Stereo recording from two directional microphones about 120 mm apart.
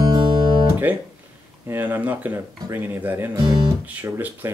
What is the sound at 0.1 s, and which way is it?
Guitar, 40° right (ahead or behind).